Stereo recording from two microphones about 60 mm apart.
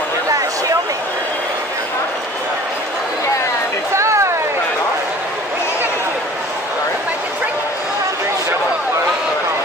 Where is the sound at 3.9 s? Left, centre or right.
Right.